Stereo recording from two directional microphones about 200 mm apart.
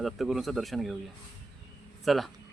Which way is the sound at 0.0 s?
Centre (ahead or behind).